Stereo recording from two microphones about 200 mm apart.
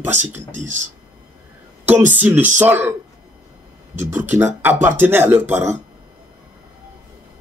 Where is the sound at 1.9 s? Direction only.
10° right (ahead or behind).